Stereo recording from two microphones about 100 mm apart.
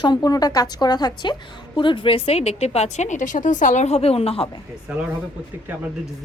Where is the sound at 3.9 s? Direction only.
90° left.